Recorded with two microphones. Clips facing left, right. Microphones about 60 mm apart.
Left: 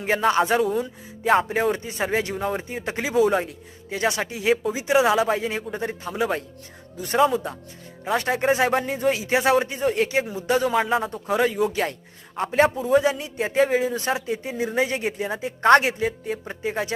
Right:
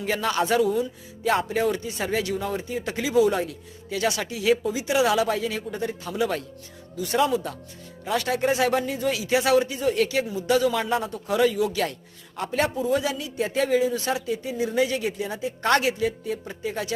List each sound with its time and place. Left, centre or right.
0.0 s speech: left
3.2 s a man's voice: centre
3.4 s speech: left
5.0 s speech: left
8.1 s speech: left
10.8 s a man's voice: centre
11.0 s speech: left